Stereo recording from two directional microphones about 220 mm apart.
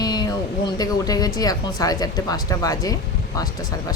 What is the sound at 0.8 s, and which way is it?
Speech, 15° left (ahead or behind).